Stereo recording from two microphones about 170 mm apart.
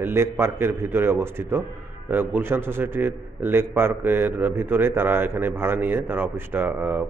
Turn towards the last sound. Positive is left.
turn(degrees=-10)  # may be behind; listen again after turning